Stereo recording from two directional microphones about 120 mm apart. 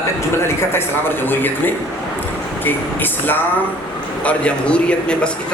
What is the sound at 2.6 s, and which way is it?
A man's voice, 15° left (ahead or behind).